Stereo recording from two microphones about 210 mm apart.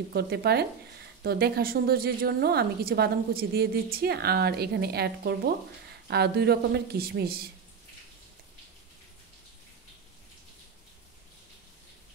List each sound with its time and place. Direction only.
0.1 s a woman's voice: 50° right (ahead or behind)